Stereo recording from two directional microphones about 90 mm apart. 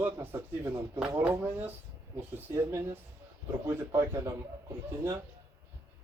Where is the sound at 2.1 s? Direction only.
30° right (ahead or behind).